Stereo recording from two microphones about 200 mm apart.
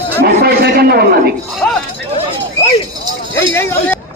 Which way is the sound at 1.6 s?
10° left (ahead or behind).